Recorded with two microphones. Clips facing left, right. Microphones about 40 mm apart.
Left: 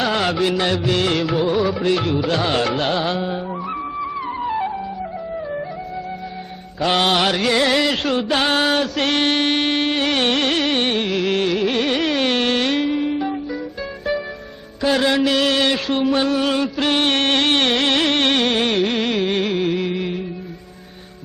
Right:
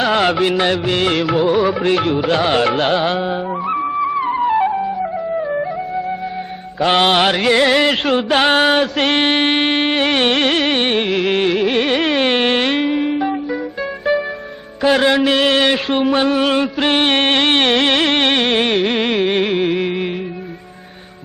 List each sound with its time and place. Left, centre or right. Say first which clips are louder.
0.0 s music: right 4 dB; right
6.7 s music: right 4 dB; right
14.8 s mantra: right 4 dB; right